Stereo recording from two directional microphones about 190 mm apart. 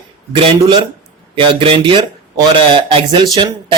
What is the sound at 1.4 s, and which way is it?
Speech, 25° right (ahead or behind).